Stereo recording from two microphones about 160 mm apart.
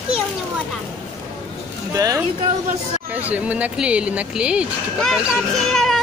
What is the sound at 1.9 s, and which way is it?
Speech, 20° right (ahead or behind).